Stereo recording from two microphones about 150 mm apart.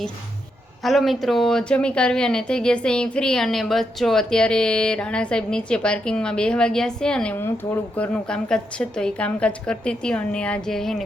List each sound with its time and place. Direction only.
0.8 s speech: centre (ahead or behind)